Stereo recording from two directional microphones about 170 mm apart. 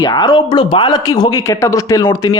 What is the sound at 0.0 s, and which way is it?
Speech, 25° left (ahead or behind).